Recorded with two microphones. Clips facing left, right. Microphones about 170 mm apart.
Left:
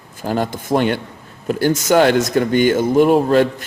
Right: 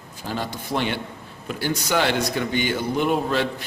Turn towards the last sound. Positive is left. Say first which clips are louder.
# left 10 dB
turn(degrees=45)  # may be behind; listen again after turning